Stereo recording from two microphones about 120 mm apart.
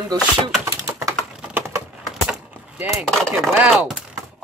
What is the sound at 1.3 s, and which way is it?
Typing, 10° right (ahead or behind).